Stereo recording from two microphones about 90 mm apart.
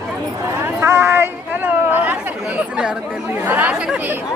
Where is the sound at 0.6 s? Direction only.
30° right (ahead or behind).